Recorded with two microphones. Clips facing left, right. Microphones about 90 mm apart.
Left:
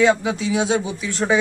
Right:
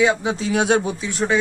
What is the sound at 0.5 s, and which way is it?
Speech, 60° right (ahead or behind).